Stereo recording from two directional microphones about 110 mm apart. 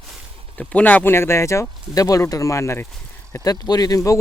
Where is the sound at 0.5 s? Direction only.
15° left (ahead or behind).